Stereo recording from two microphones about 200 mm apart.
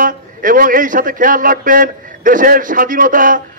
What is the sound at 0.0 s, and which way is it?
Speech, 45° right (ahead or behind).